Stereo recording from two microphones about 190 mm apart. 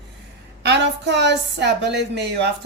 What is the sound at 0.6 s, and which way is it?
A woman's voice, 65° right (ahead or behind).